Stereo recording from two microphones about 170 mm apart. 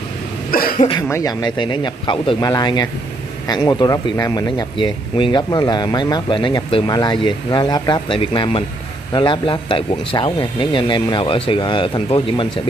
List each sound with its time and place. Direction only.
0.5 s cough: 60° left (ahead or behind)
1.0 s speech: 20° left (ahead or behind)